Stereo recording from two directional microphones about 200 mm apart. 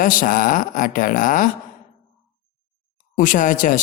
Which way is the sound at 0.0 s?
40° left (ahead or behind).